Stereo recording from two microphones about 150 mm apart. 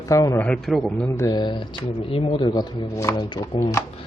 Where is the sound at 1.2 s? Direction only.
25° left (ahead or behind).